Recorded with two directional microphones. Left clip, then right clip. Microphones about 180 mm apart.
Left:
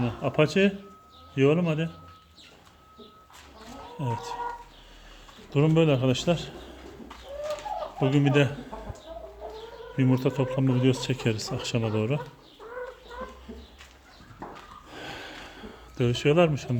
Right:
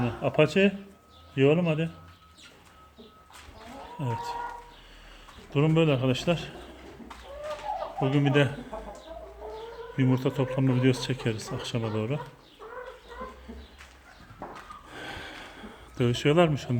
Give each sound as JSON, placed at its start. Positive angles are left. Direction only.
{"t": 0.0, "sound": "speech", "side_deg": 5}
{"t": 3.9, "sound": "speech", "side_deg": 5}
{"t": 5.5, "sound": "speech", "side_deg": 10}
{"t": 7.9, "sound": "speech", "side_deg": 15}
{"t": 8.3, "sound": "speech", "side_deg": 5}
{"t": 10.0, "sound": "speech", "side_deg": 10}
{"t": 14.8, "sound": "a sound", "side_deg": 10}